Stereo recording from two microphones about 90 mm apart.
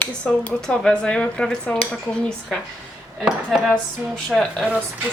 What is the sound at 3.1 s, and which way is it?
Dishes, 5° right (ahead or behind).